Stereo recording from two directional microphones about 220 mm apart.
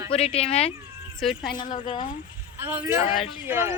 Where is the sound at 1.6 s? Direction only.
35° left (ahead or behind).